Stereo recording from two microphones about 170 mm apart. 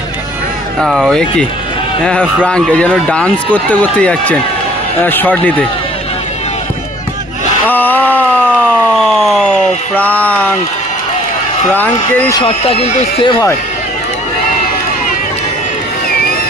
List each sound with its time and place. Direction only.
0.8 s speech: centre (ahead or behind)
7.7 s a sound: 10° left (ahead or behind)
9.0 s siren: centre (ahead or behind)
9.9 s speech: 10° left (ahead or behind)
12.3 s speech: 30° left (ahead or behind)